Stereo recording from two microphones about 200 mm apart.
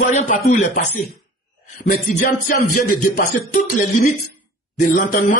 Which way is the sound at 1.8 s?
40° left (ahead or behind).